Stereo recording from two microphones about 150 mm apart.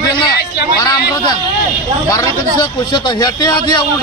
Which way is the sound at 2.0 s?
25° left (ahead or behind).